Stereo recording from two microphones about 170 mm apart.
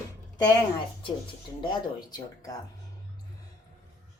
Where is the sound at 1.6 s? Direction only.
25° left (ahead or behind).